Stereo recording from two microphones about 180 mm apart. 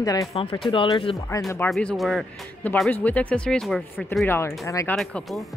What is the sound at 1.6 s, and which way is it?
Speech, centre (ahead or behind).